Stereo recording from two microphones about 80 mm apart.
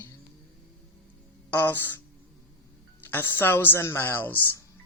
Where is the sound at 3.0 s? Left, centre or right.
Left.